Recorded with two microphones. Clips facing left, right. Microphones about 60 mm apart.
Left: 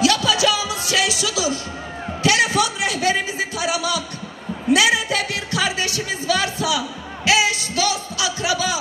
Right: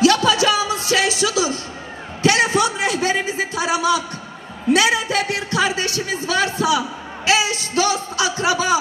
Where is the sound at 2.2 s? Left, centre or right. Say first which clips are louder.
Right 2 dB; right.